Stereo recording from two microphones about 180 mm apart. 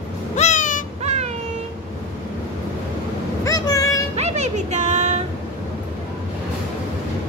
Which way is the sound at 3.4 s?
20° left (ahead or behind).